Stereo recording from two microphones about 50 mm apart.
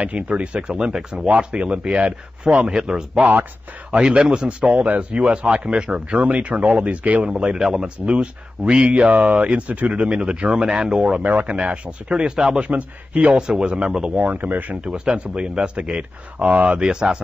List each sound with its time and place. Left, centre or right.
0.3 s a man's voice: right
4.7 s a man's voice: right
6.5 s speech: centre
6.8 s a man's voice: right; by 7.9 s centre
8.1 s a man's voice: right
11.2 s a man's voice: right
13.3 s speech: centre
14.3 s speech: right
14.9 s a man's voice: right
16.9 s speech: centre